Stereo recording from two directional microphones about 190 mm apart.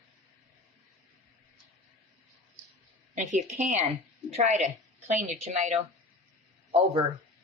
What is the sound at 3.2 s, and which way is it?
A woman's voice, 35° right (ahead or behind).